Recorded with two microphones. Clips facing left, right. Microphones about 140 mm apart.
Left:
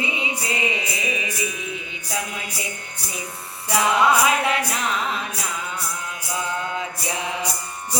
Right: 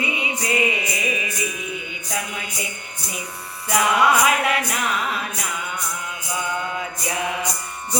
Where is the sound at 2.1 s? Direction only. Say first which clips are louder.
Even; 30° left (ahead or behind).